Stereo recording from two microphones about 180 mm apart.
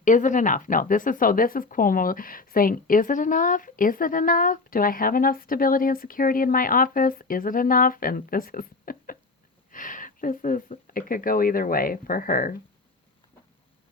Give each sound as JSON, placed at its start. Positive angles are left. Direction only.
{"t": 0.0, "sound": "speech", "side_deg": 45}